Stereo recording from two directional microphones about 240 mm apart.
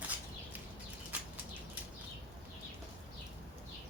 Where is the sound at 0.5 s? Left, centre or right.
Centre.